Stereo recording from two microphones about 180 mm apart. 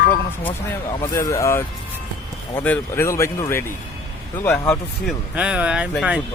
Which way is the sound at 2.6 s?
10° left (ahead or behind).